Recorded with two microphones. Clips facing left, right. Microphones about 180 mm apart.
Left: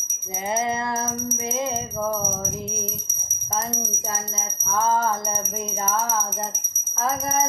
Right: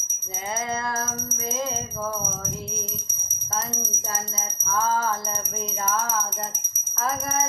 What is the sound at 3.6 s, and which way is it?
Music, 10° left (ahead or behind).